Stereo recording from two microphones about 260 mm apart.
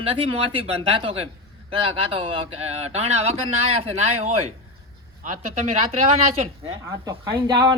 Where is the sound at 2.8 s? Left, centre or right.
Right.